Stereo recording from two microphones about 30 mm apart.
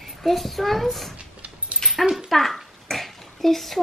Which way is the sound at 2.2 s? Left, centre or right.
Centre.